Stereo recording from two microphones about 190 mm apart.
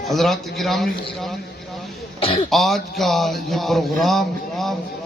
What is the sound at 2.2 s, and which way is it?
Speech, 30° left (ahead or behind).